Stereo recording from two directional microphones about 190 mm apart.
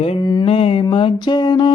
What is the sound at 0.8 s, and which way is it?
Mantra, 25° left (ahead or behind).